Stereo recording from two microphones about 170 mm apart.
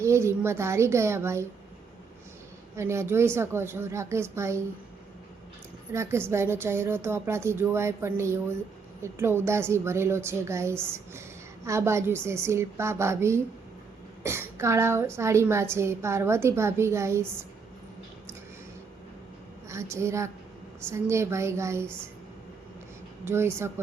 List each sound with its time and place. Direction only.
0.0 s a woman's voice: 15° right (ahead or behind)
2.7 s a woman's voice: 15° right (ahead or behind)
5.9 s a woman's voice: 15° right (ahead or behind)
19.6 s a woman's voice: 15° right (ahead or behind)
23.2 s a woman's voice: 15° right (ahead or behind)